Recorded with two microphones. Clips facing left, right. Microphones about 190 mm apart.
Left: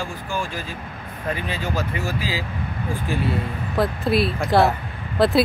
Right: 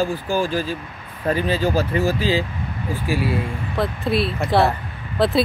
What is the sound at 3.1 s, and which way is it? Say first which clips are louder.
Speech: right 3 dB; 5° right (ahead or behind).